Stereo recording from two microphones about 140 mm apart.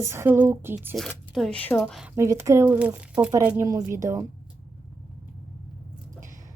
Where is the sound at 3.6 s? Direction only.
25° right (ahead or behind).